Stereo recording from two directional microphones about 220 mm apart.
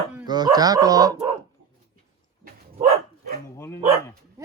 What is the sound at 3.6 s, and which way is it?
Speech, 10° left (ahead or behind).